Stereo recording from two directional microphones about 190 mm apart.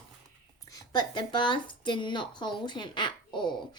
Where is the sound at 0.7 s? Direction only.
20° left (ahead or behind).